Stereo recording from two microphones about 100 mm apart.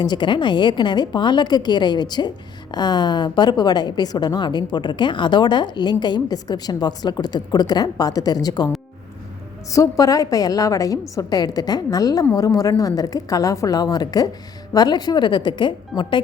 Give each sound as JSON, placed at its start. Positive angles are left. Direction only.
{"t": 0.0, "sound": "a woman's voice", "side_deg": 50}
{"t": 9.7, "sound": "a woman's voice", "side_deg": 35}